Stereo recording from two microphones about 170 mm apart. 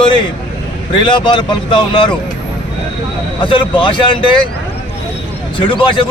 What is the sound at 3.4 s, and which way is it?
Speech, 30° left (ahead or behind).